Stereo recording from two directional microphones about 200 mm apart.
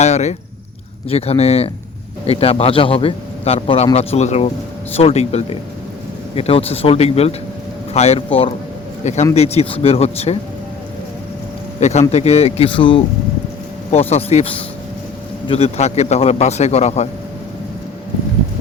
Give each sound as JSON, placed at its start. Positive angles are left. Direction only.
{"t": 0.0, "sound": "a man's voice", "side_deg": 35}
{"t": 11.8, "sound": "a man's voice", "side_deg": 35}